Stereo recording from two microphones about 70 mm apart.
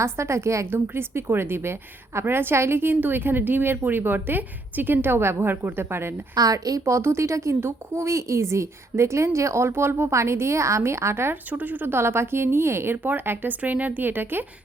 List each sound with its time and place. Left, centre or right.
0.0 s a woman's voice: right
0.7 s a woman's voice: right
6.3 s a woman's voice: right
11.4 s speech: right